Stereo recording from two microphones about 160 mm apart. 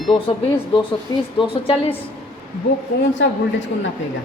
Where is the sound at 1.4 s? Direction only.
30° left (ahead or behind).